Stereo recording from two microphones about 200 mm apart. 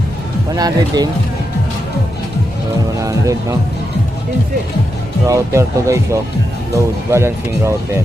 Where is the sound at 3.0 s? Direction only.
15° right (ahead or behind).